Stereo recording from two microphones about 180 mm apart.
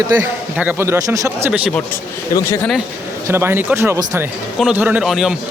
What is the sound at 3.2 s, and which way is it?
A man's voice, 15° right (ahead or behind).